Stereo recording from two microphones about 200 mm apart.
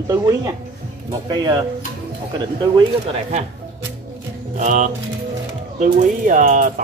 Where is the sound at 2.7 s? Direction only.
30° right (ahead or behind).